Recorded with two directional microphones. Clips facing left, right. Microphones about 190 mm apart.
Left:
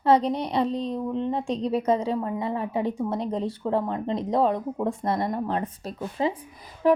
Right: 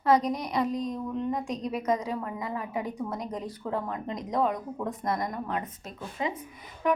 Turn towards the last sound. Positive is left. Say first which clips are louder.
# left 6 dB
turn(degrees=30)  # may be behind; listen again after turning